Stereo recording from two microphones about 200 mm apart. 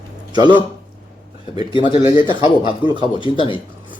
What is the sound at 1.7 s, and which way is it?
Speech, 25° left (ahead or behind).